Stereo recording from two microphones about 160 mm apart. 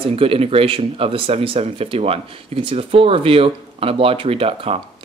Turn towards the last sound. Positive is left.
turn(degrees=-35)  # may be behind; listen again after turning